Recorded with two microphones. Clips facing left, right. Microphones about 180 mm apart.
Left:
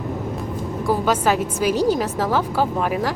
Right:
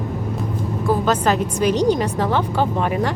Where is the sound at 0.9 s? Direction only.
10° left (ahead or behind).